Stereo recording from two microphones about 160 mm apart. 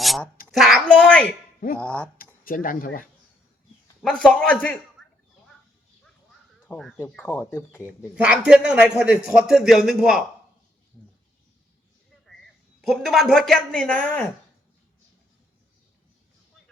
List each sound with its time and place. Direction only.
0.0 s a sound: centre (ahead or behind)
0.5 s a man's voice: centre (ahead or behind)
2.1 s speech: 60° left (ahead or behind)
4.0 s a man's voice: 5° left (ahead or behind)
6.7 s speech: 5° left (ahead or behind)
7.3 s a man's voice: 15° left (ahead or behind)
7.9 s a man's voice: 5° right (ahead or behind)
12.8 s a man's voice: centre (ahead or behind)